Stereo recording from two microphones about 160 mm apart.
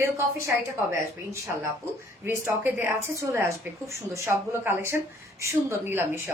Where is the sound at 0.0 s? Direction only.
15° right (ahead or behind).